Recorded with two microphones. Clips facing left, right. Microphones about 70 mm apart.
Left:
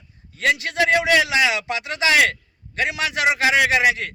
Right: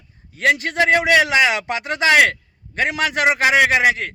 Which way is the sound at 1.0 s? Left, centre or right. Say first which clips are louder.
Right 3 dB; right.